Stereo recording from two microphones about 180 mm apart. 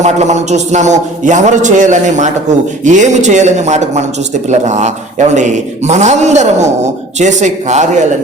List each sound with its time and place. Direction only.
0.0 s a man's voice: 40° right (ahead or behind)